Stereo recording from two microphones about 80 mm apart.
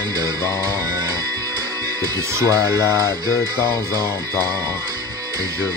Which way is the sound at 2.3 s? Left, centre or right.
Right.